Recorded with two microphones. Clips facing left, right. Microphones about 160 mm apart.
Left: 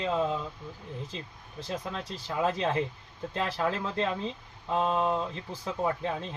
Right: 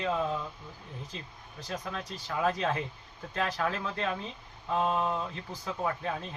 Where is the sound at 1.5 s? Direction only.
25° left (ahead or behind).